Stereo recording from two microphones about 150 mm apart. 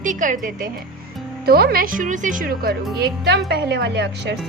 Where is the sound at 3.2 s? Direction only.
90° right.